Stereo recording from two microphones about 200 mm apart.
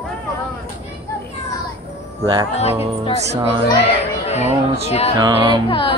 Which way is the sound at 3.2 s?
30° right (ahead or behind).